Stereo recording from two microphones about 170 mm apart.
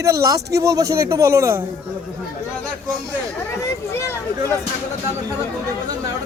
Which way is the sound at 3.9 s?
15° left (ahead or behind).